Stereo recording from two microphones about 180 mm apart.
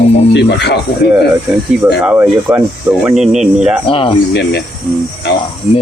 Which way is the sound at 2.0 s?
10° right (ahead or behind).